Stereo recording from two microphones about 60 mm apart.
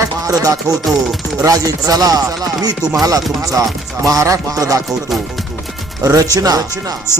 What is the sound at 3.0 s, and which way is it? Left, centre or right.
Music, right.